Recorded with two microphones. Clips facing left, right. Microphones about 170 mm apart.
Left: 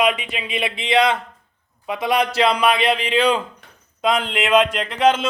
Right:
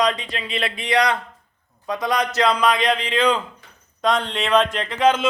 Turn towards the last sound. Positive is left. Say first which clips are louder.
# left 1 dB
turn(degrees=5)  # may be behind; listen again after turning